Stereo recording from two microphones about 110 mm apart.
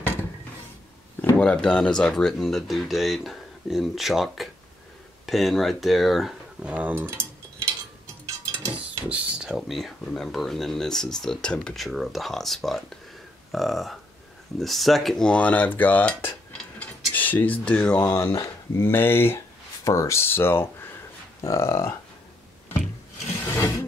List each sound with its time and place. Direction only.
1.4 s speech: 10° left (ahead or behind)
6.7 s speech: 15° right (ahead or behind)
8.7 s speech: 10° right (ahead or behind)
14.6 s cutlery: centre (ahead or behind); by 16.3 s 15° left (ahead or behind)
16.8 s speech: 15° left (ahead or behind)
23.4 s wood: 20° left (ahead or behind)